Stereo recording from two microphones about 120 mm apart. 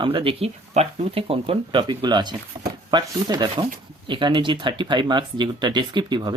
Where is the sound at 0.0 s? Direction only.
45° right (ahead or behind).